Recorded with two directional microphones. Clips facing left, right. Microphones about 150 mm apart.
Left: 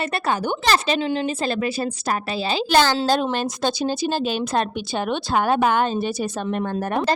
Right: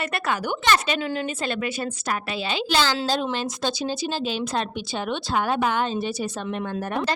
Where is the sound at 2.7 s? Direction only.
50° left (ahead or behind).